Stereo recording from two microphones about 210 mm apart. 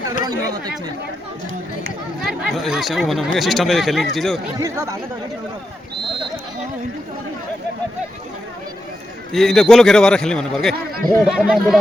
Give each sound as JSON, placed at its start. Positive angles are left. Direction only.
{"t": 0.3, "sound": "speech", "side_deg": -20}
{"t": 2.2, "sound": "a man's voice", "side_deg": 0}
{"t": 4.5, "sound": "speech", "side_deg": -15}
{"t": 9.3, "sound": "a man's voice", "side_deg": 0}